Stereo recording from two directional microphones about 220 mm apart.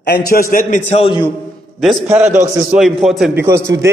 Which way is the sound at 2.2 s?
30° right (ahead or behind).